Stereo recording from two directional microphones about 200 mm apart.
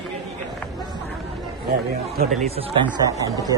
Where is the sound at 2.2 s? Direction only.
35° right (ahead or behind).